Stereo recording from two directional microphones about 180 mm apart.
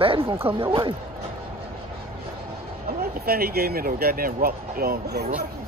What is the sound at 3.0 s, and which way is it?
Speech, 60° right (ahead or behind).